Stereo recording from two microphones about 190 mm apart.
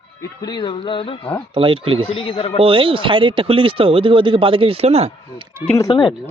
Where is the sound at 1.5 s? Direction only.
30° right (ahead or behind).